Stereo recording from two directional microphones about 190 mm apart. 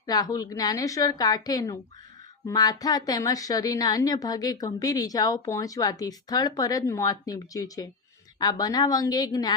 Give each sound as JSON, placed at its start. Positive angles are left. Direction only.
{"t": 0.0, "sound": "a woman's voice", "side_deg": 20}